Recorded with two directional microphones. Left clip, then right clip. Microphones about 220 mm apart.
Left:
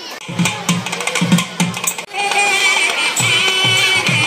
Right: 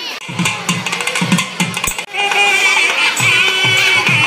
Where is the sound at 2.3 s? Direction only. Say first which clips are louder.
Right 2 dB; 40° left (ahead or behind).